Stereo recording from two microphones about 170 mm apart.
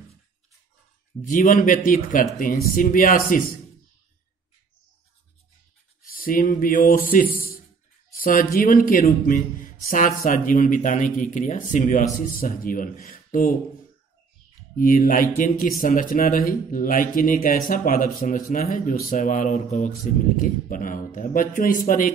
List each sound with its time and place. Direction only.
1.2 s speech: 50° left (ahead or behind)
6.1 s a man's voice: 55° left (ahead or behind)
14.8 s speech: 55° left (ahead or behind)